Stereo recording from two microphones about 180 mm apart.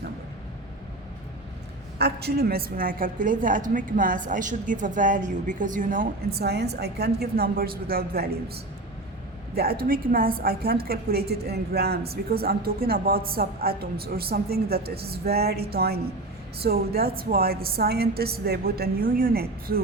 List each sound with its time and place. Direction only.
2.0 s a woman's voice: 65° right (ahead or behind)
9.6 s a woman's voice: 55° right (ahead or behind)